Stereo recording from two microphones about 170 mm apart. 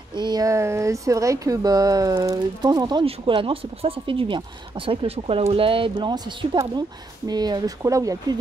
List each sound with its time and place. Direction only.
0.1 s speech: 25° right (ahead or behind)